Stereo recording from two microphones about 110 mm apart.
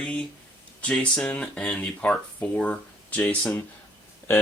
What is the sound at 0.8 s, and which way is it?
Speech, 10° left (ahead or behind).